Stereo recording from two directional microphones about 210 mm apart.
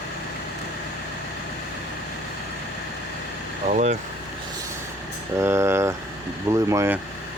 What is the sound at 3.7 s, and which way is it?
Speech, 35° right (ahead or behind).